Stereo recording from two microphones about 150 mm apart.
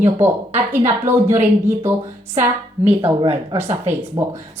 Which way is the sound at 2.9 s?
35° right (ahead or behind).